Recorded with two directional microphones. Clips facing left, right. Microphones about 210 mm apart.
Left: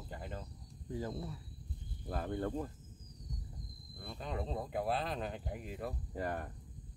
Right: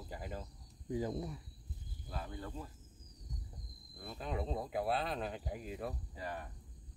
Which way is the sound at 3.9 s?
Centre (ahead or behind).